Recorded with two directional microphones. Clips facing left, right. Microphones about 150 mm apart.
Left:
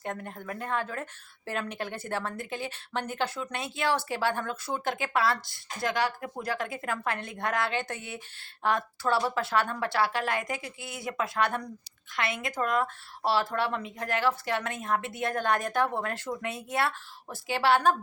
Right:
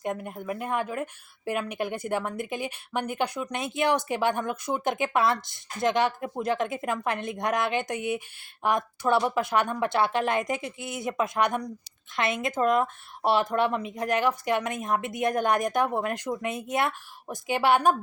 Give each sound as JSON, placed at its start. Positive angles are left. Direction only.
{"t": 0.0, "sound": "a woman's voice", "side_deg": -10}